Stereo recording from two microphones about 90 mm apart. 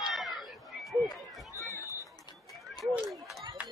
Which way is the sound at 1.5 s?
35° left (ahead or behind).